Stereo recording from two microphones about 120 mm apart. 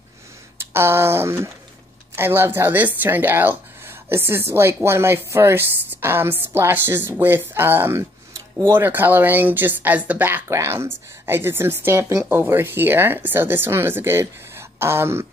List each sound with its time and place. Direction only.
0.6 s a woman's voice: 20° right (ahead or behind)